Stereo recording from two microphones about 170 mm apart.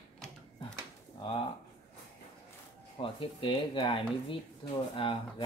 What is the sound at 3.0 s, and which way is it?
Speech, 30° left (ahead or behind).